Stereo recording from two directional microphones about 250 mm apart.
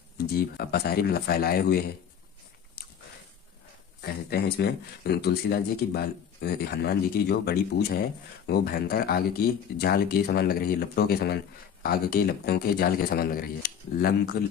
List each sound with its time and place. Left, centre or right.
0.2 s speech: left
2.8 s a sound: left
4.0 s speech: left